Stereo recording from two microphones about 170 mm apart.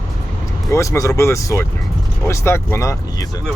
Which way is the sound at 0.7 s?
15° left (ahead or behind).